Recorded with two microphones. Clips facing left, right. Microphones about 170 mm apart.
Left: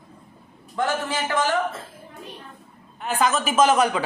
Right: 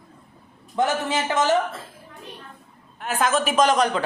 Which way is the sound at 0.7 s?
20° right (ahead or behind).